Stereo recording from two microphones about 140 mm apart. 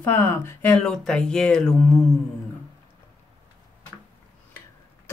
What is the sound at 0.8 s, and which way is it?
Speech, 5° left (ahead or behind).